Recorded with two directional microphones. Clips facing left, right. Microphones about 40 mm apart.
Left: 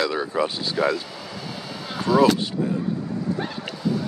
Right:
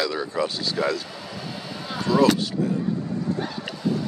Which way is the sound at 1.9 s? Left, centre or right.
Left.